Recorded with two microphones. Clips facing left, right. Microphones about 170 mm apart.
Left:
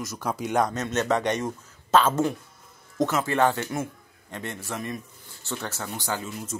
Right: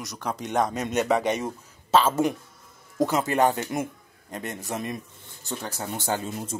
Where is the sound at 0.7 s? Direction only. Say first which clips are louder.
Right 1 dB; 10° right (ahead or behind).